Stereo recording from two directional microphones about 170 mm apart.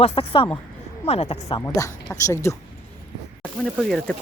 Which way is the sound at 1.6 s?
15° left (ahead or behind).